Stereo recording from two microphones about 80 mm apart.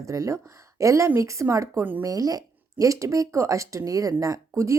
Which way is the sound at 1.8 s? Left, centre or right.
Right.